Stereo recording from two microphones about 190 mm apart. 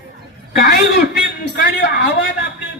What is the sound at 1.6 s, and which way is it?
Speech, 55° left (ahead or behind).